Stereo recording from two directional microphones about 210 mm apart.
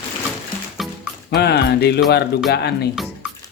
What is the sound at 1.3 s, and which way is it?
Music, 50° left (ahead or behind).